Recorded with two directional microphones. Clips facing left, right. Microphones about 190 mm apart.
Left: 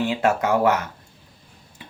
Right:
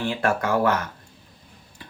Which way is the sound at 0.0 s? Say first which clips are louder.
Left 3 dB; 20° left (ahead or behind).